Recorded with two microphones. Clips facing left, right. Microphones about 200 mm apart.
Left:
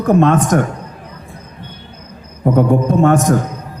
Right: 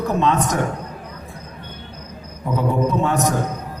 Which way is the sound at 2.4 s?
50° left (ahead or behind).